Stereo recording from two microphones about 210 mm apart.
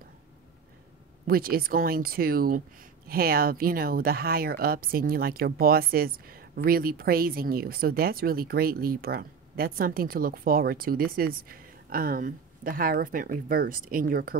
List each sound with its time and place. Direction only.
1.2 s speech: 45° right (ahead or behind)